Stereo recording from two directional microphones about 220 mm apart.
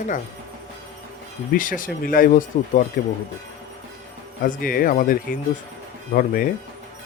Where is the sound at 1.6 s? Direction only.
40° left (ahead or behind).